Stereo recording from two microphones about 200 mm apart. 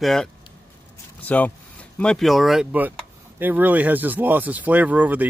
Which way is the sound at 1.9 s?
5° left (ahead or behind).